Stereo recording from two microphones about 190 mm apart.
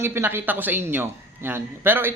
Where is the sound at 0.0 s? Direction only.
10° right (ahead or behind).